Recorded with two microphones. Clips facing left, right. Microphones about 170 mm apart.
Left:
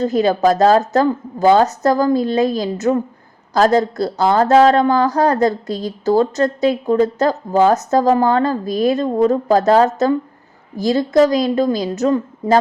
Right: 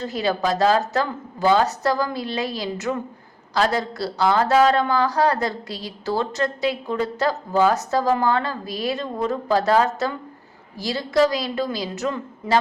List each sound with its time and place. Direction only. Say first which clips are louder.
0.0 s speech: left 8 dB; 45° left (ahead or behind)